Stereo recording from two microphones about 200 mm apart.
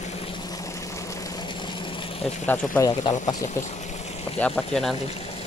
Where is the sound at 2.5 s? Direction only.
20° left (ahead or behind).